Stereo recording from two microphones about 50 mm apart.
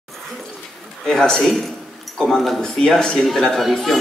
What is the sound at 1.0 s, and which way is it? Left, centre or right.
A woman's voice, centre.